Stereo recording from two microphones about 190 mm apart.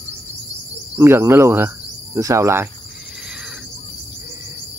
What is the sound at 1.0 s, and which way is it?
Cricket, 15° right (ahead or behind).